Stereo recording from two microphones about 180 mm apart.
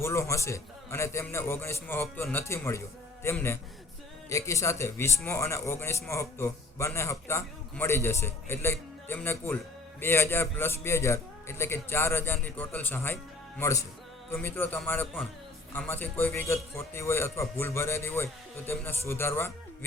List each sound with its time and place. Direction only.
0.0 s a man's voice: 15° left (ahead or behind)